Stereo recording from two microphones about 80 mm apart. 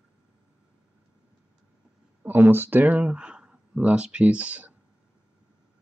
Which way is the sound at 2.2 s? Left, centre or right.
Right.